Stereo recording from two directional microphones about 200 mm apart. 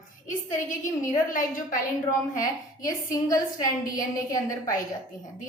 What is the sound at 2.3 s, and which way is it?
A woman's voice, 15° left (ahead or behind).